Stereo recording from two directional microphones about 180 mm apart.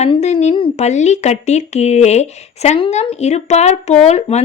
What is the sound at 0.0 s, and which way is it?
Speech, 35° left (ahead or behind).